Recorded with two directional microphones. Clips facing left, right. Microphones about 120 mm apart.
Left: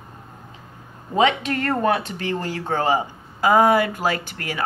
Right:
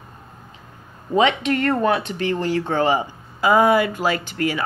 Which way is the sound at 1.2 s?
40° left (ahead or behind).